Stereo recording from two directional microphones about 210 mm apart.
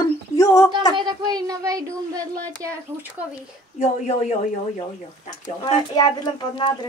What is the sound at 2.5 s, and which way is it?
Speech, 15° right (ahead or behind).